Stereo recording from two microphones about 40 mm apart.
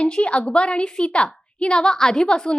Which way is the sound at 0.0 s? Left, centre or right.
Left.